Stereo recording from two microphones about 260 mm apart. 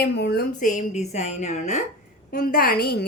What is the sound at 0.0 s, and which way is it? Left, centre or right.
A woman's voice, left.